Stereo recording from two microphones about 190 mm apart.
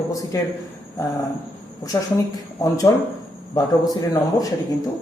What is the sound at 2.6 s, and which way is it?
Speech, 20° left (ahead or behind).